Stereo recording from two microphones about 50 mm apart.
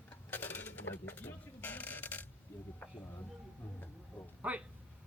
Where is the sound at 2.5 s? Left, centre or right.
Left.